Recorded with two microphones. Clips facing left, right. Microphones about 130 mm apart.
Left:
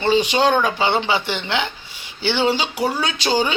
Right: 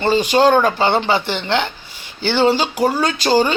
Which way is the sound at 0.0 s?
45° right (ahead or behind).